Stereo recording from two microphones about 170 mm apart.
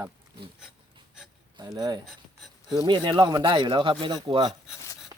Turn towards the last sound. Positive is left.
turn(degrees=-25)  # may be behind; listen again after turning